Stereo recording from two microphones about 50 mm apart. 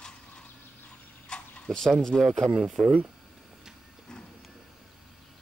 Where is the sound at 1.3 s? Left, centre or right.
Centre.